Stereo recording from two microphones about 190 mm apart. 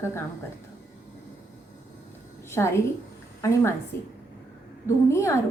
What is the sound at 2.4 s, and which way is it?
A woman's voice, 15° left (ahead or behind).